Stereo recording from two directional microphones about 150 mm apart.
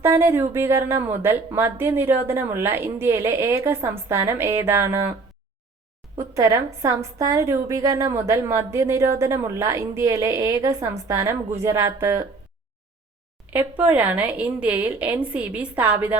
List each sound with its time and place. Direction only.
0.0 s speech: 15° right (ahead or behind)
6.1 s a woman's voice: 20° right (ahead or behind)
13.5 s speech: 10° right (ahead or behind)